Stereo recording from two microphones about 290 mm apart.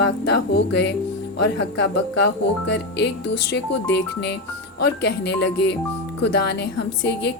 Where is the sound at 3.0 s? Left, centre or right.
Left.